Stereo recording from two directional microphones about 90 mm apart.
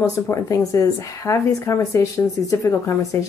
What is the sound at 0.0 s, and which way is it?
Speech, 35° left (ahead or behind).